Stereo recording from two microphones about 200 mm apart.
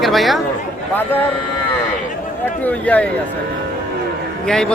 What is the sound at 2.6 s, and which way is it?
Speech, 5° left (ahead or behind).